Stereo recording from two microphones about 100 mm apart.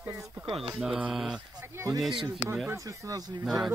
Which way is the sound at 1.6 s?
25° right (ahead or behind).